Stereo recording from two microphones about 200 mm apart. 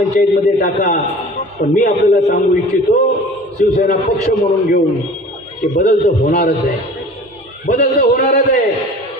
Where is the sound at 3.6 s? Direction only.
45° left (ahead or behind).